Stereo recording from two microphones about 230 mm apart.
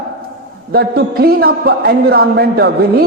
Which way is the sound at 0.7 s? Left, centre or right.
Right.